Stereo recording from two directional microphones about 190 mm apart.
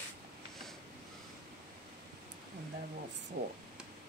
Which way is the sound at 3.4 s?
70° right (ahead or behind).